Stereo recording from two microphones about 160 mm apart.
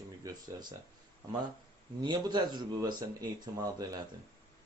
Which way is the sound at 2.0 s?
25° right (ahead or behind).